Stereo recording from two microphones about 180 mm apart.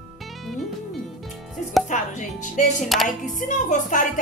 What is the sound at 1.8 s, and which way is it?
Speech, 45° left (ahead or behind).